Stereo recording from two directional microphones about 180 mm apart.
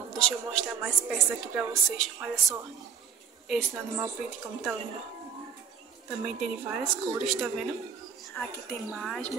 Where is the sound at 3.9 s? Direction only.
15° right (ahead or behind).